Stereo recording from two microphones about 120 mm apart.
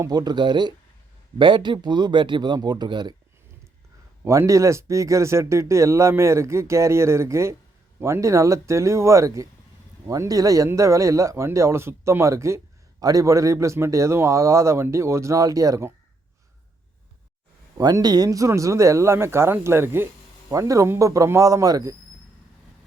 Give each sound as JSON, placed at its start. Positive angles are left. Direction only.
{"t": 0.0, "sound": "speech", "side_deg": -35}
{"t": 4.2, "sound": "speech", "side_deg": -25}
{"t": 17.7, "sound": "speech", "side_deg": -30}